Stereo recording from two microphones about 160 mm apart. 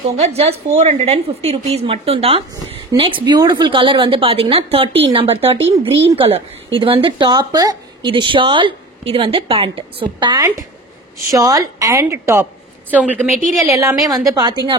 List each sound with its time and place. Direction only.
0.2 s speech: 40° right (ahead or behind)
11.2 s a woman's voice: 20° right (ahead or behind)